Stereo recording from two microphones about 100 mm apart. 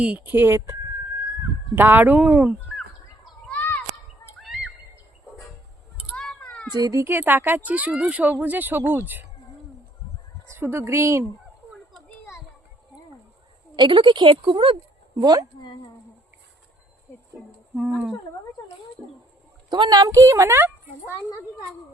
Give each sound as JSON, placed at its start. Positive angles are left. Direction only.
{"t": 0.0, "sound": "speech", "side_deg": -15}
{"t": 3.5, "sound": "children playing", "side_deg": 15}
{"t": 4.4, "sound": "a sound", "side_deg": -5}
{"t": 6.1, "sound": "a sound", "side_deg": 10}
{"t": 6.7, "sound": "a woman's voice", "side_deg": -40}
{"t": 7.0, "sound": "speech", "side_deg": -20}
{"t": 10.5, "sound": "speech", "side_deg": -25}
{"t": 13.7, "sound": "a woman's voice", "side_deg": -55}
{"t": 15.2, "sound": "a woman's voice", "side_deg": -40}
{"t": 17.7, "sound": "speech", "side_deg": -10}
{"t": 19.7, "sound": "a woman's voice", "side_deg": -45}
{"t": 21.1, "sound": "a child's voice", "side_deg": 30}